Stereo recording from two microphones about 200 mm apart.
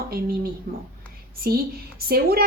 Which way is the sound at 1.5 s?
50° right (ahead or behind).